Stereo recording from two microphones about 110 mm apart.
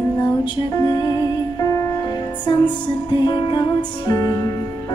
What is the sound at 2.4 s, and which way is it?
Music, 40° left (ahead or behind).